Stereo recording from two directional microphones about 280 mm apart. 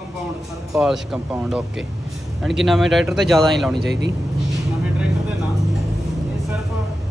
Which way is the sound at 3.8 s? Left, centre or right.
Right.